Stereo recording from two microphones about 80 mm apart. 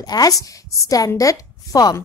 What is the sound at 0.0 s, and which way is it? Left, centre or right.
A woman's voice, left.